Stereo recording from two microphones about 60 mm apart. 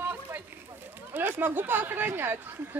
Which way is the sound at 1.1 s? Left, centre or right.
Right.